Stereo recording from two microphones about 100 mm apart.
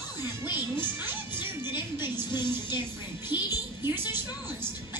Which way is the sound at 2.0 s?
20° right (ahead or behind).